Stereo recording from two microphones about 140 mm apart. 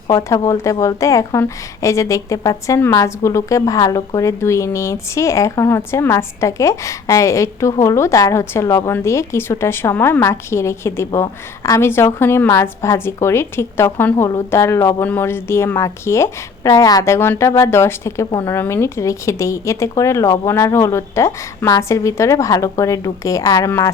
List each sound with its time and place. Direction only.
0.1 s a woman's voice: 25° left (ahead or behind)